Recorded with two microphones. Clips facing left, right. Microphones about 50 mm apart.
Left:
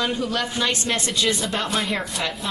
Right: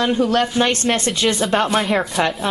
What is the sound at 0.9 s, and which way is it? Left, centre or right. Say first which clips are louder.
Speech: right 4 dB; centre.